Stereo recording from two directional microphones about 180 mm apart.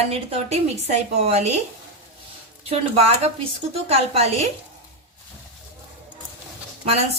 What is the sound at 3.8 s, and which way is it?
Speech, 35° right (ahead or behind).